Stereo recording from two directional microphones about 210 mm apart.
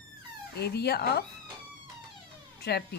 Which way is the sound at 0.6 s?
50° left (ahead or behind).